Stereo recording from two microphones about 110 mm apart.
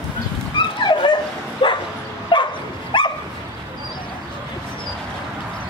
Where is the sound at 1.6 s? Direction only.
45° left (ahead or behind).